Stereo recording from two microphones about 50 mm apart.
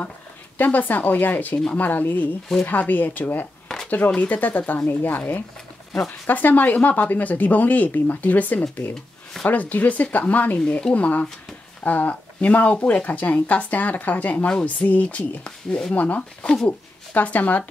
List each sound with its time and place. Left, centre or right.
0.6 s speech: left
3.6 s a sound: centre
4.1 s speech: left
6.2 s speech: left